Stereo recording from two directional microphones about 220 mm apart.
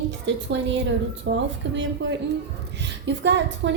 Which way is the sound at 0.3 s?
55° right (ahead or behind).